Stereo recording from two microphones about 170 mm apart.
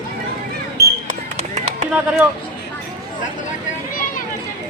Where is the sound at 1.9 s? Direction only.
5° right (ahead or behind).